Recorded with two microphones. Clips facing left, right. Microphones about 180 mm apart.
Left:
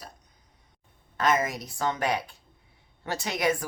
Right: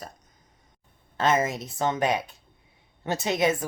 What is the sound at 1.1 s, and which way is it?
A woman's voice, 25° right (ahead or behind).